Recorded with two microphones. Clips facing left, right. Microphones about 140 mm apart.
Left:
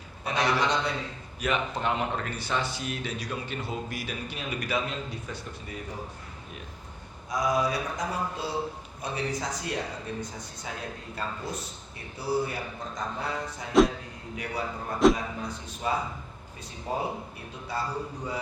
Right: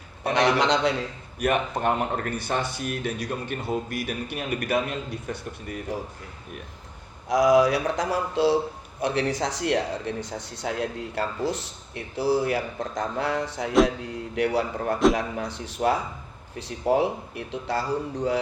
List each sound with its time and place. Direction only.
0.3 s speech: 70° right (ahead or behind); by 0.9 s 90° right
1.4 s speech: 55° right (ahead or behind)
7.3 s speech: 90° right